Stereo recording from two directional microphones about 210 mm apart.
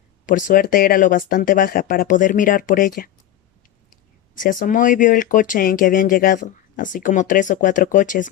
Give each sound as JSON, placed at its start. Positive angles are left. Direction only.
{"t": 0.3, "sound": "speech", "side_deg": 40}
{"t": 4.4, "sound": "speech", "side_deg": 40}